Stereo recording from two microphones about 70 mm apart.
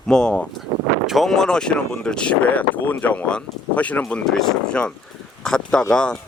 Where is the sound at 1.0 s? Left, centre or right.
Centre.